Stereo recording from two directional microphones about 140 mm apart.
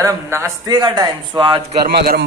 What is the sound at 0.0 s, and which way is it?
A man's voice, 20° right (ahead or behind).